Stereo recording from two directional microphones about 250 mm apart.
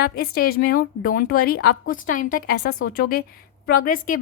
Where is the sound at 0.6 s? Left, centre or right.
Left.